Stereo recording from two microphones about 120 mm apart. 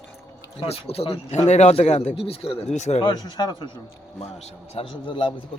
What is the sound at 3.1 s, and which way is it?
Speech, 35° left (ahead or behind).